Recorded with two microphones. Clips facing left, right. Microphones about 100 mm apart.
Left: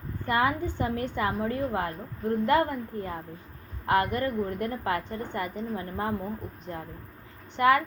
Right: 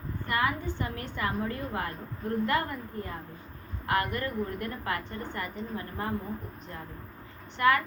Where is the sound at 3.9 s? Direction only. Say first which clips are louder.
Left 4 dB; 25° left (ahead or behind).